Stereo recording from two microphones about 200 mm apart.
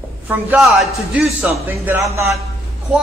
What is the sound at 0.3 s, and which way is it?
A man's voice, 10° right (ahead or behind).